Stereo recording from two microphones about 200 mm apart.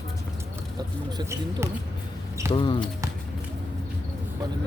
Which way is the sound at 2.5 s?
25° left (ahead or behind).